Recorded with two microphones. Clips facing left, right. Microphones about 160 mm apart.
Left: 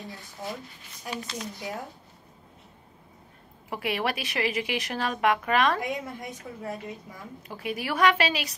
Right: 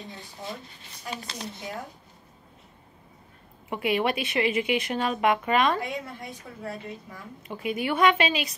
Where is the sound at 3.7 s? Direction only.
Centre (ahead or behind).